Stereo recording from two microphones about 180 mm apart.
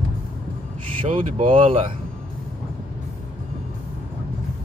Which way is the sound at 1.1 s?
40° right (ahead or behind).